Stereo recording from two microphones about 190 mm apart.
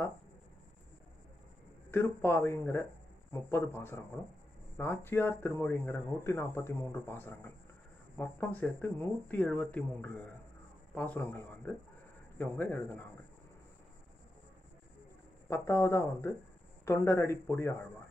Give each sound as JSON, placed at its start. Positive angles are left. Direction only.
{"t": 1.9, "sound": "speech", "side_deg": 10}
{"t": 15.5, "sound": "speech", "side_deg": 15}